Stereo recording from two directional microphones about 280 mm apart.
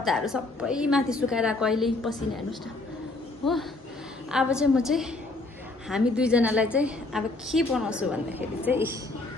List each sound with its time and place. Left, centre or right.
0.0 s a woman's voice: centre
4.3 s a woman's voice: centre